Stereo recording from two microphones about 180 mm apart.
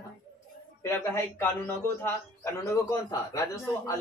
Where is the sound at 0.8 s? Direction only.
15° left (ahead or behind).